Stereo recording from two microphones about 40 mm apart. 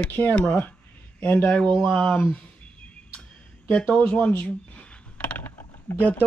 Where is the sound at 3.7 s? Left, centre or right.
Left.